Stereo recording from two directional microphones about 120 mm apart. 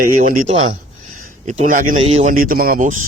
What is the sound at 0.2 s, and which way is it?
Speech, 75° right (ahead or behind).